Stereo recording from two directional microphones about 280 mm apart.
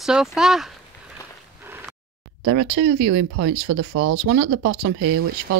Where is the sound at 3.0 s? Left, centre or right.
Right.